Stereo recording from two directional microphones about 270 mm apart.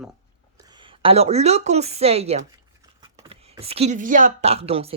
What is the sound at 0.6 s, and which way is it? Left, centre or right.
A woman's voice, centre.